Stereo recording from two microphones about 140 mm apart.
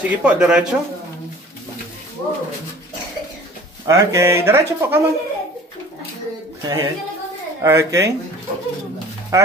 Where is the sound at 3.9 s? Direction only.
20° right (ahead or behind).